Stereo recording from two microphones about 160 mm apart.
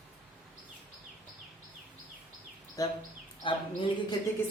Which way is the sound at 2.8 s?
20° left (ahead or behind).